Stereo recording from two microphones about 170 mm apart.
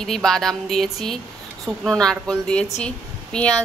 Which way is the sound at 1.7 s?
20° right (ahead or behind).